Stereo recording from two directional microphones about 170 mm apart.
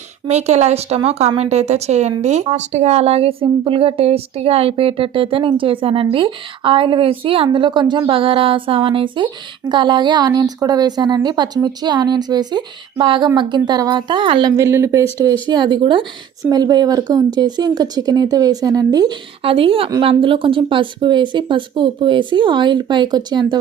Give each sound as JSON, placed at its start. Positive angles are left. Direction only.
{"t": 0.3, "sound": "speech", "side_deg": -40}
{"t": 19.4, "sound": "speech", "side_deg": -35}